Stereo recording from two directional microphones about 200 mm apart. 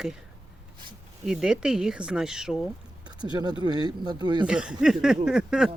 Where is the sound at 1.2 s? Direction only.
5° right (ahead or behind).